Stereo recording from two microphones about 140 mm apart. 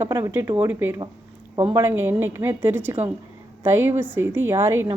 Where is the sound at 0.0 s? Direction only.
20° right (ahead or behind).